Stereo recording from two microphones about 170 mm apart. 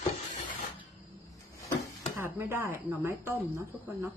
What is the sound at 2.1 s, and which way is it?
Speech, 10° right (ahead or behind).